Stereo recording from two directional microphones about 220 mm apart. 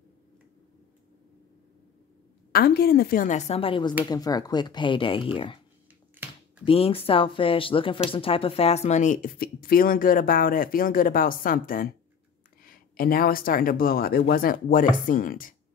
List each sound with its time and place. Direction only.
2.5 s speech: 45° left (ahead or behind); by 5.6 s 25° left (ahead or behind)
6.6 s speech: 25° left (ahead or behind)